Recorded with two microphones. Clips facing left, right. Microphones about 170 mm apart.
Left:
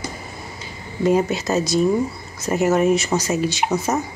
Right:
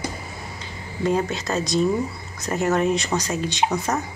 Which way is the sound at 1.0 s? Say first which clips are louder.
Left 4 dB; 10° left (ahead or behind).